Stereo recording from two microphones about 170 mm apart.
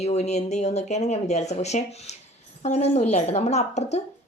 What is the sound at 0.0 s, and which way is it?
A woman's voice, 40° left (ahead or behind).